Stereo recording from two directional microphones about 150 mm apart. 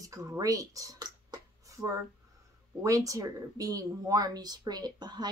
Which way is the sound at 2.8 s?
20° right (ahead or behind).